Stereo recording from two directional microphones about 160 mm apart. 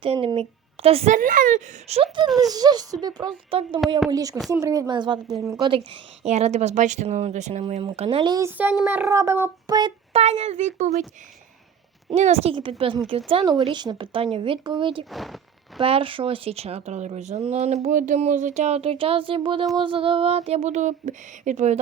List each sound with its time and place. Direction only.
0.0 s a woman's voice: 35° right (ahead or behind)
1.1 s a woman's voice: 55° right (ahead or behind)
2.2 s speech: centre (ahead or behind)
2.5 s a woman's voice: 25° right (ahead or behind)
4.4 s speech: centre (ahead or behind)
4.6 s a woman's voice: 20° right (ahead or behind)
6.2 s a woman's voice: 45° right (ahead or behind)
7.9 s a sound: 40° right (ahead or behind)
8.4 s speech: 10° right (ahead or behind)
10.1 s a woman's voice: 40° right (ahead or behind)
12.1 s a sound: 40° right (ahead or behind)
15.1 s speech: centre (ahead or behind)
15.8 s a sound: 35° right (ahead or behind)